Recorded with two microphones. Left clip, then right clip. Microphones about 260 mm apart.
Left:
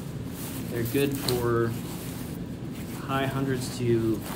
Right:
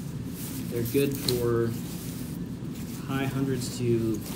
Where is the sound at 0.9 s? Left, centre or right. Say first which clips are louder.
Even; left.